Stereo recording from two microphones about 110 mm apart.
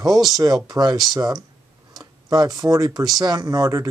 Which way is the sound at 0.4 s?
40° right (ahead or behind).